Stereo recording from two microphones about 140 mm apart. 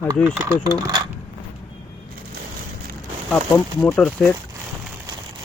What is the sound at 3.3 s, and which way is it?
Speech, 20° left (ahead or behind).